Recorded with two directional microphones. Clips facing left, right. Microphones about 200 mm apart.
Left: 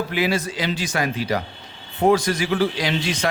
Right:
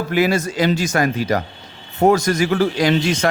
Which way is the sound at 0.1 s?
45° right (ahead or behind).